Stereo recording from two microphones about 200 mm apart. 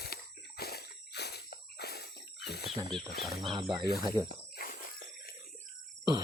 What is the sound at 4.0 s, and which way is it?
Speech, 20° right (ahead or behind).